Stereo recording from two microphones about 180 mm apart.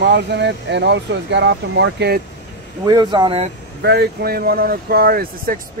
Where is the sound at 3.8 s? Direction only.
65° right (ahead or behind).